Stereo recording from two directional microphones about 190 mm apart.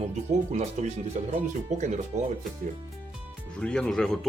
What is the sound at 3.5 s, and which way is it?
Speech, 5° left (ahead or behind).